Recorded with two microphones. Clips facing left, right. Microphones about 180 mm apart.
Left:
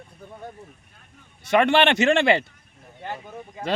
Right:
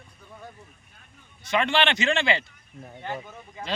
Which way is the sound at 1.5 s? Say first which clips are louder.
Left 6 dB; 60° left (ahead or behind).